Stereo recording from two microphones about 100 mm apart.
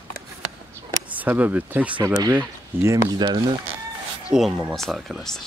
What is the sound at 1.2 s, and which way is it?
Speech, 15° right (ahead or behind).